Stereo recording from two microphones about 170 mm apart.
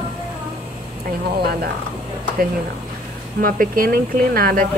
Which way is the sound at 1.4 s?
65° right (ahead or behind).